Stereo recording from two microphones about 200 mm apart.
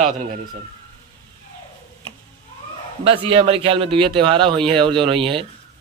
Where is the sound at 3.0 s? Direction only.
30° right (ahead or behind).